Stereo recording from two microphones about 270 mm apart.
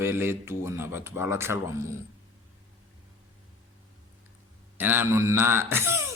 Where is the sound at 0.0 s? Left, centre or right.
Centre.